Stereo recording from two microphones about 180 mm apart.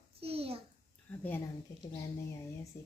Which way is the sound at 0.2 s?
35° right (ahead or behind).